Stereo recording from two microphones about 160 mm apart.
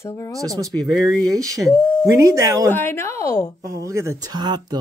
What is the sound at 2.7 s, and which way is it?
Speech, 15° left (ahead or behind).